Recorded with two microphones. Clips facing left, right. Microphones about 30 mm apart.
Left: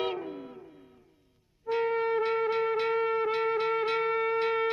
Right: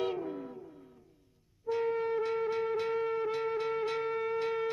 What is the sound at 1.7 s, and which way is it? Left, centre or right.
Music, left.